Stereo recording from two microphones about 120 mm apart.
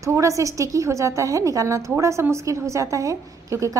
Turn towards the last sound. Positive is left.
turn(degrees=-25)  # may be behind; listen again after turning